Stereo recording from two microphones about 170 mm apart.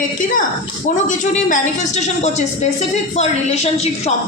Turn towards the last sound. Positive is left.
turn(degrees=40)  # may be behind; listen again after turning